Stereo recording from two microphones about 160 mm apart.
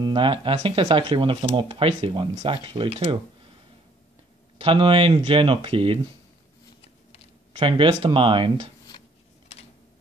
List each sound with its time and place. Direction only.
0.0 s speech: 30° right (ahead or behind)
4.6 s speech: 35° right (ahead or behind)
7.5 s speech: 30° right (ahead or behind)